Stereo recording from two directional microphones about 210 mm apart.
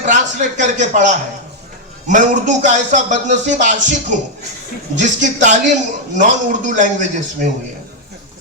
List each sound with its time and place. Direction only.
0.0 s speech: 35° right (ahead or behind)